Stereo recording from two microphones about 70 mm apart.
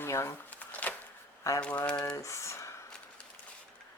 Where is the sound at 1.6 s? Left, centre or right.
Centre.